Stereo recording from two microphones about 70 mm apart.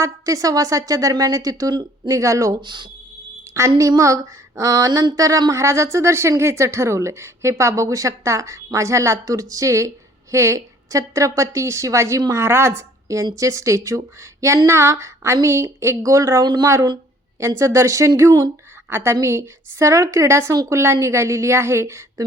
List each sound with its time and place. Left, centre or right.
0.0 s a woman's voice: right
2.1 s a woman's voice: right
16.4 s speech: right
17.4 s a woman's voice: right
18.9 s a woman's voice: right